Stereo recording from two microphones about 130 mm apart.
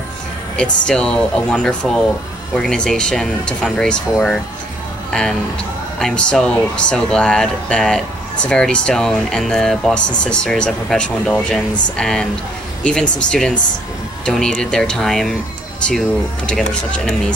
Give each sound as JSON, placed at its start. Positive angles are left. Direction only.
{"t": 0.8, "sound": "speech", "side_deg": 5}
{"t": 16.4, "sound": "speech", "side_deg": 5}